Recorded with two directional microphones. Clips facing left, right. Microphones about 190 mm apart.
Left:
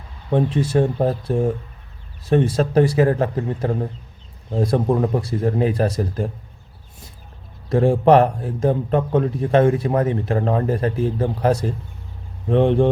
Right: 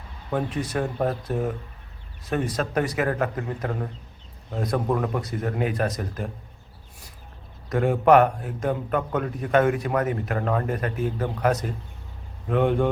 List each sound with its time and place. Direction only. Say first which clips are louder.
0.3 s a man's voice: left 7 dB; 25° left (ahead or behind)
7.7 s a man's voice: left 4 dB; 30° left (ahead or behind)